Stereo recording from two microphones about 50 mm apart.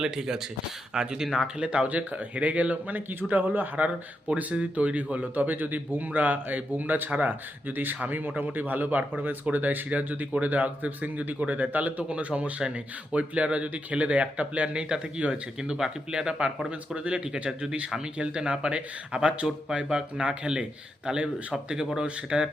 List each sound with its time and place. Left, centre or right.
0.0 s speech: centre
1.5 s speech: right